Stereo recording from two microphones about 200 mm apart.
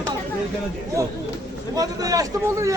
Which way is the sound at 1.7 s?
20° right (ahead or behind).